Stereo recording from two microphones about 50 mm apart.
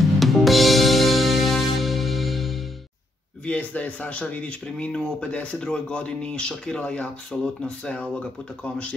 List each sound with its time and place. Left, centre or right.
0.2 s music: centre
3.4 s speech: left